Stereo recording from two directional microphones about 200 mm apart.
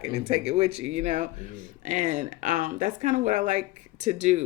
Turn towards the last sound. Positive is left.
turn(degrees=-35)  # may be behind; listen again after turning